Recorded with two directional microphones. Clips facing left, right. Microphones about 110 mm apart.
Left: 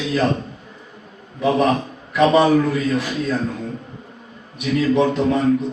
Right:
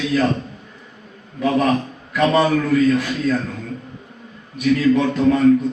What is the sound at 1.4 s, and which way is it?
A man's voice, 25° left (ahead or behind).